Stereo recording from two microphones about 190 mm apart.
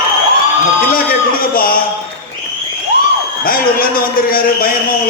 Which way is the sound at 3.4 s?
50° left (ahead or behind).